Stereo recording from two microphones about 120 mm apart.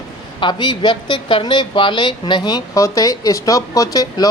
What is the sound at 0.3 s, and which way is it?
A woman's voice, 40° left (ahead or behind).